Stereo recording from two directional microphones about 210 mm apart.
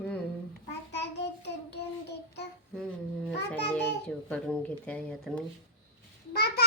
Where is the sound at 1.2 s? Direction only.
55° left (ahead or behind).